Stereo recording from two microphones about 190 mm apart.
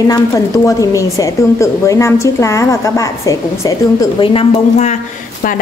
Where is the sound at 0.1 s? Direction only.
15° left (ahead or behind).